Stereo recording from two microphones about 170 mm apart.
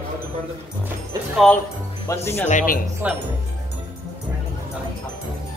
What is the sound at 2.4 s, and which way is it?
Speech, 50° left (ahead or behind).